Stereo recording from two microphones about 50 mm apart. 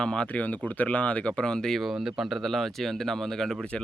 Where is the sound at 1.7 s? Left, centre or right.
Centre.